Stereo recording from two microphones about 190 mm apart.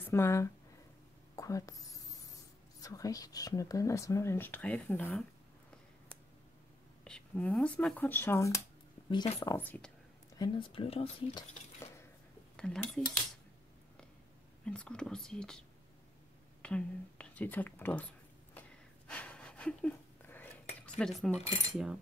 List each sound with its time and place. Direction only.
0.0 s speech: 15° left (ahead or behind)
1.3 s a sound: 15° left (ahead or behind)
2.8 s speech: 20° left (ahead or behind)
7.1 s speech: 5° left (ahead or behind)
10.3 s speech: 25° left (ahead or behind)
12.5 s cutlery: 5° left (ahead or behind)
14.6 s speech: 5° left (ahead or behind)
16.6 s a sound: 5° left (ahead or behind)
21.0 s speech: 5° left (ahead or behind)